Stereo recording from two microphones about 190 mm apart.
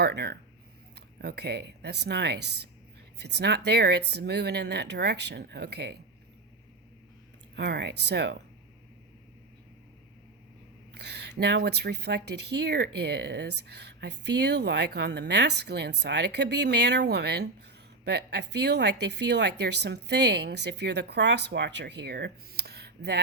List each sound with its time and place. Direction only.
0.0 s speech: 60° right (ahead or behind)
7.5 s speech: 65° right (ahead or behind)
10.9 s speech: 60° right (ahead or behind)